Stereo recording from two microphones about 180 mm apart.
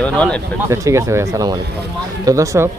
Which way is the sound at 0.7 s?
15° right (ahead or behind).